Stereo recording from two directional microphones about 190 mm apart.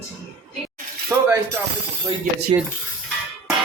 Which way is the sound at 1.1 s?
15° right (ahead or behind).